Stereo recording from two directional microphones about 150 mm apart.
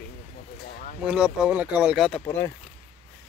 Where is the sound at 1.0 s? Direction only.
5° right (ahead or behind).